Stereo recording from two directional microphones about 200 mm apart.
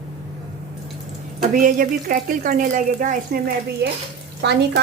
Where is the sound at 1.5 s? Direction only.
45° right (ahead or behind).